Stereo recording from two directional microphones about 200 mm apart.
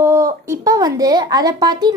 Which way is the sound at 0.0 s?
15° right (ahead or behind).